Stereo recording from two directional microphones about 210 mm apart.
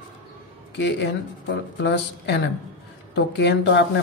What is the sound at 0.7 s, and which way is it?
Speech, 55° left (ahead or behind).